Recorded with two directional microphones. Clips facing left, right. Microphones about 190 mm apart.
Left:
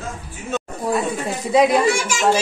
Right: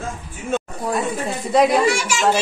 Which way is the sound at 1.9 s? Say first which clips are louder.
Even; 50° left (ahead or behind).